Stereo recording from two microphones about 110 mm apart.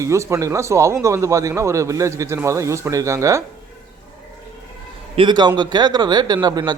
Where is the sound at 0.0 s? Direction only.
25° right (ahead or behind).